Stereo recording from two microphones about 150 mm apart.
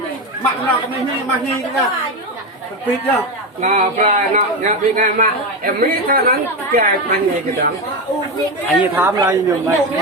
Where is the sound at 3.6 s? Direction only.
55° right (ahead or behind).